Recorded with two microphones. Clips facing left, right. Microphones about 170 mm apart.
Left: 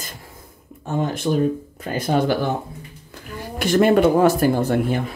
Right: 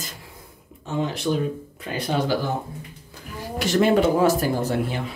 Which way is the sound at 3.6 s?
55° left (ahead or behind).